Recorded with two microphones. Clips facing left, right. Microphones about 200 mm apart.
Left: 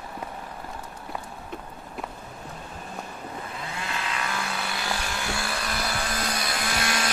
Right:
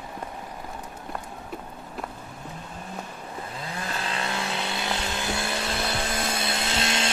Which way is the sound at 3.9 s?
35° right (ahead or behind).